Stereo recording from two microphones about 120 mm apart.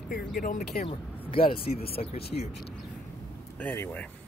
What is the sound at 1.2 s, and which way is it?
Speech, 50° left (ahead or behind).